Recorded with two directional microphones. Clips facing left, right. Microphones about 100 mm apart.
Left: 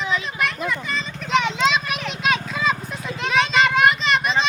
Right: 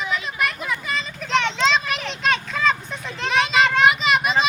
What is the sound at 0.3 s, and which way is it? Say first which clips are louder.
Children playing: left 1 dB; 5° right (ahead or behind).